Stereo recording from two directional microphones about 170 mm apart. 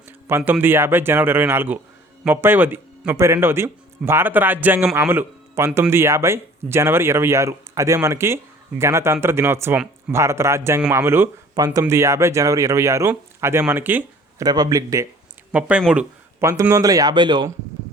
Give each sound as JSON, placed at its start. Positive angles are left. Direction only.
{"t": 0.3, "sound": "speech", "side_deg": -15}
{"t": 14.4, "sound": "speech", "side_deg": -25}
{"t": 15.5, "sound": "speech", "side_deg": -10}
{"t": 16.4, "sound": "speech", "side_deg": -15}